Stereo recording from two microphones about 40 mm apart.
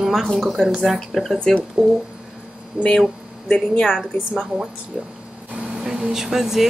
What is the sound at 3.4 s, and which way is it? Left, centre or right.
Speech, left.